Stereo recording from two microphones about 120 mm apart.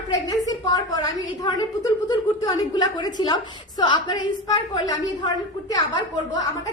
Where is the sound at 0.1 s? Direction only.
30° left (ahead or behind).